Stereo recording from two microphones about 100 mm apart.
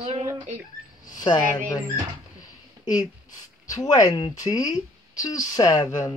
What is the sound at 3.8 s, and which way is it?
Speech, 35° left (ahead or behind).